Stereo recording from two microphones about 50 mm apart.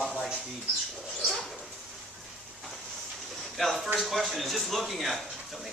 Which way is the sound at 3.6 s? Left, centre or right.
Centre.